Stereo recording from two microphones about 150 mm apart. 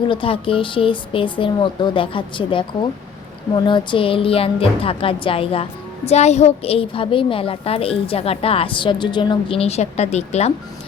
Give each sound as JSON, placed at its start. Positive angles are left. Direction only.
{"t": 0.1, "sound": "a woman's voice", "side_deg": 35}